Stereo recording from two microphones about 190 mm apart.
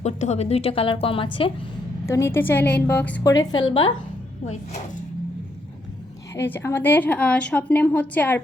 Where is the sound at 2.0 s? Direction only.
15° left (ahead or behind).